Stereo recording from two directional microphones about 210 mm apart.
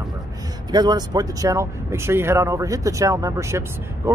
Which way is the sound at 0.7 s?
20° right (ahead or behind).